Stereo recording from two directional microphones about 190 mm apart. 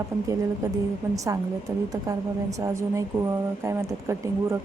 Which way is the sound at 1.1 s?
15° right (ahead or behind).